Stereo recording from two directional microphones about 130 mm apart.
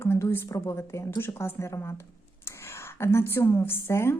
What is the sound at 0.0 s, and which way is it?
A woman's voice, 20° left (ahead or behind).